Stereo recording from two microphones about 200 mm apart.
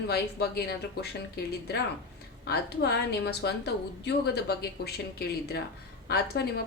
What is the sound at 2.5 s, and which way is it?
A woman's voice, 55° left (ahead or behind).